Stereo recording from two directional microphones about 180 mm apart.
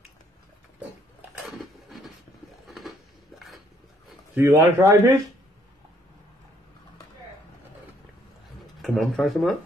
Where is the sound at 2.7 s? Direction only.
Centre (ahead or behind).